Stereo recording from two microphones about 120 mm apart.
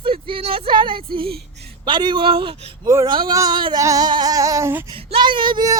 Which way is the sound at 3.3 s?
30° right (ahead or behind).